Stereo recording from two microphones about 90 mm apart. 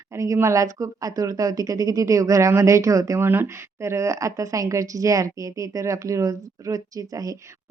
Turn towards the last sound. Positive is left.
turn(degrees=-40)  # may be behind; listen again after turning